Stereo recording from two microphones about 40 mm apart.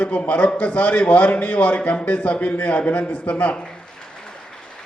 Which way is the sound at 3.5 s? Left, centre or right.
Left.